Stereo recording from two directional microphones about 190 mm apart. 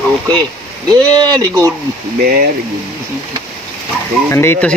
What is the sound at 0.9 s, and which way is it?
Speech, 20° right (ahead or behind).